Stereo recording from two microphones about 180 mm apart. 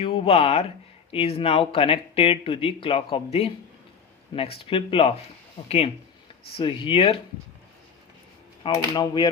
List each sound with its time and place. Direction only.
0.0 s speech: 30° left (ahead or behind)
8.6 s speech: 25° left (ahead or behind)